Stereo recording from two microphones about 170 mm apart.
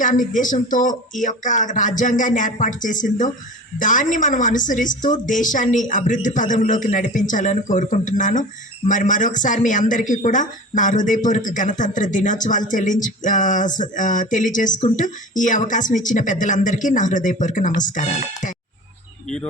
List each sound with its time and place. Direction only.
0.0 s speech: 50° left (ahead or behind)